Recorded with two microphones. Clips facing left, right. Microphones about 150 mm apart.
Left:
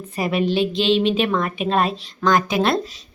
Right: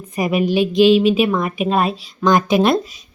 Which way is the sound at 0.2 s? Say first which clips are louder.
Right 3 dB; 10° right (ahead or behind).